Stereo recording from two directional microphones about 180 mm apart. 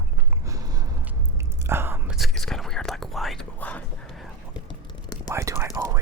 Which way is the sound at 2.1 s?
Centre (ahead or behind).